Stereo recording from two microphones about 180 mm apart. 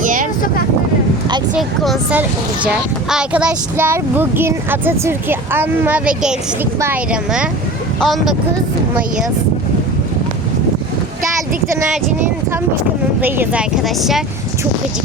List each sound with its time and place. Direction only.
0.0 s vehicle: 50° right (ahead or behind)
1.5 s speech: centre (ahead or behind)
13.2 s speech: 10° right (ahead or behind)